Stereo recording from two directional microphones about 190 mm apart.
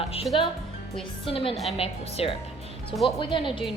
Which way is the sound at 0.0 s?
30° left (ahead or behind).